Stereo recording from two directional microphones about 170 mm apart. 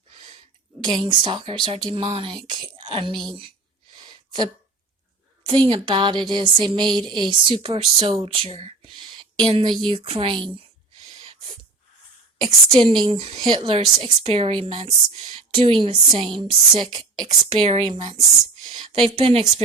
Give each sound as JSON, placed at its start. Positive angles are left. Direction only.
{"t": 0.8, "sound": "a woman's voice", "side_deg": -25}
{"t": 4.1, "sound": "a sound", "side_deg": -25}
{"t": 5.5, "sound": "a woman's voice", "side_deg": -35}
{"t": 12.4, "sound": "a woman's voice", "side_deg": -25}